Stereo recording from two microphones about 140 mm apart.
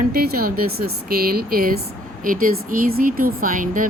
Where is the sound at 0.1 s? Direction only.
90° right.